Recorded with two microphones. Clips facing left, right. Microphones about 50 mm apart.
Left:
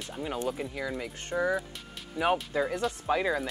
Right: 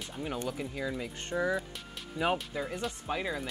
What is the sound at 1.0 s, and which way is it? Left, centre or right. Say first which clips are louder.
Speech: left 4 dB; left.